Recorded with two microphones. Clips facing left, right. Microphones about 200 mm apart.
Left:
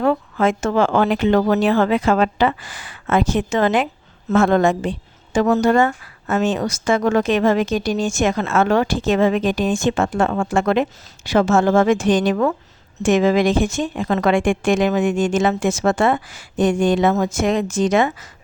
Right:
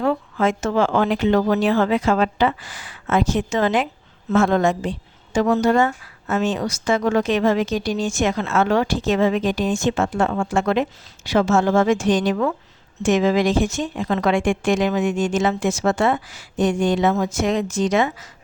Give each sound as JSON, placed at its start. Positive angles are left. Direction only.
{"t": 0.0, "sound": "speech", "side_deg": 55}